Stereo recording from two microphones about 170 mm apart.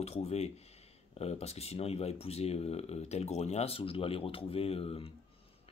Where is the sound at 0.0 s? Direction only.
40° left (ahead or behind).